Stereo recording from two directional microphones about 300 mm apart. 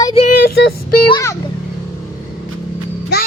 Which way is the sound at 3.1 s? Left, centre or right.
Left.